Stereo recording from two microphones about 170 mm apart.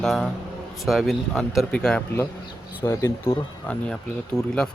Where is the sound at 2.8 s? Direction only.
15° left (ahead or behind).